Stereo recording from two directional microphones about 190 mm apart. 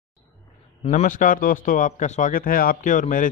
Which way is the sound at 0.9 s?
40° left (ahead or behind).